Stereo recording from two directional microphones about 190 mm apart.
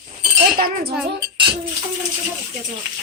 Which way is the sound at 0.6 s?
50° right (ahead or behind).